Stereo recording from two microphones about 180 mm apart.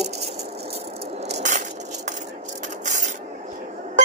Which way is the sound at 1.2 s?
40° right (ahead or behind).